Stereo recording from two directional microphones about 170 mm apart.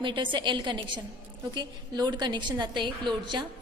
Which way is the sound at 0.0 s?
30° right (ahead or behind).